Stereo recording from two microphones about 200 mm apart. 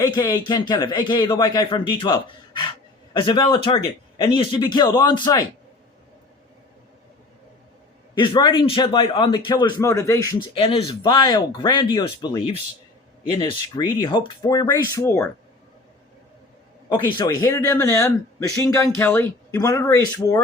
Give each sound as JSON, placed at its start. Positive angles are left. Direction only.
{"t": 0.0, "sound": "a man's voice", "side_deg": 20}
{"t": 8.1, "sound": "a man's voice", "side_deg": 25}
{"t": 10.6, "sound": "a man's voice", "side_deg": 25}
{"t": 16.9, "sound": "a man's voice", "side_deg": 20}